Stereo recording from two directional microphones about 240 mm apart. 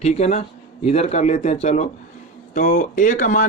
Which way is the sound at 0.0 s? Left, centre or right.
Left.